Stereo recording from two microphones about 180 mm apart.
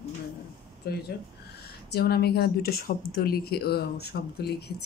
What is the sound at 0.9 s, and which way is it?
Speech, 60° left (ahead or behind).